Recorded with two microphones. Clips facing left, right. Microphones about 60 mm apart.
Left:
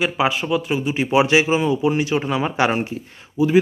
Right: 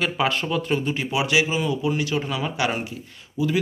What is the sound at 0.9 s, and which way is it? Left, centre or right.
A man's voice, left.